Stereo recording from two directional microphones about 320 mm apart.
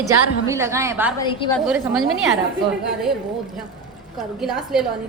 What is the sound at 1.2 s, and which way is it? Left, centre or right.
Speech, centre.